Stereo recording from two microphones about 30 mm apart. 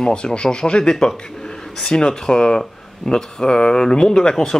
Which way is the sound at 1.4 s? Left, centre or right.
Centre.